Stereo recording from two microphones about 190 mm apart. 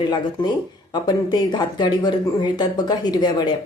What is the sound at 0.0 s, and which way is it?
Speech, 20° left (ahead or behind).